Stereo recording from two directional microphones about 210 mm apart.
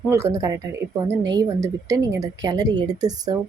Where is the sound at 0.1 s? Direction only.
15° right (ahead or behind).